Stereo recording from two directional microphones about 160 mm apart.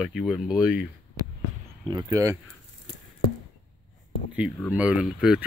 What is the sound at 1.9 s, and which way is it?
Speech, 25° right (ahead or behind).